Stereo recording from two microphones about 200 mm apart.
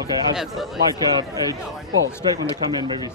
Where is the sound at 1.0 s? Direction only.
20° right (ahead or behind).